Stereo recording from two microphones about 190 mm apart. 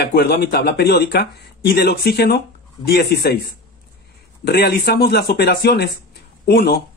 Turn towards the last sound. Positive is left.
turn(degrees=55)  # may be behind; listen again after turning